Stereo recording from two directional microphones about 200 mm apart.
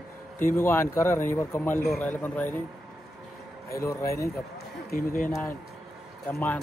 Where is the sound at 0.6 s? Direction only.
10° left (ahead or behind).